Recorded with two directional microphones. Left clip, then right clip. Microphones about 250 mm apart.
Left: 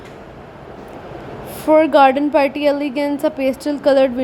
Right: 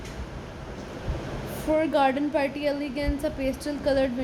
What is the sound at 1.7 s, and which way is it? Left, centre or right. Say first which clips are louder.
Speech: left 12 dB; left.